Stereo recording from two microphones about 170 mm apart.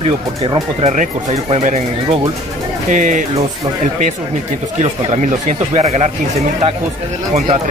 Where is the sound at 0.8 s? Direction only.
40° right (ahead or behind).